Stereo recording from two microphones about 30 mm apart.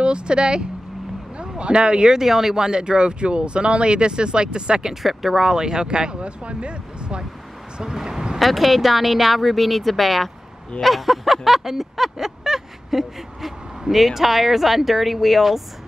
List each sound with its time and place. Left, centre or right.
0.0 s speech: right
2.1 s speech: centre
2.5 s speech: right
5.0 s a sound: centre
5.5 s speech: right
7.7 s speech: right
8.4 s a sound: centre